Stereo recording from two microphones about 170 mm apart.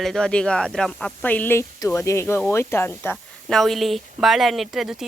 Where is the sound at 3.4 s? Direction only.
Centre (ahead or behind).